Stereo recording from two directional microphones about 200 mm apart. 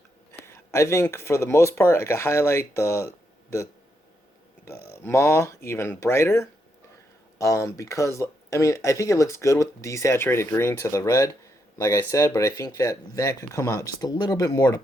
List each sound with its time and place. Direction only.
0.4 s speech: 15° left (ahead or behind)
4.6 s speech: 15° left (ahead or behind)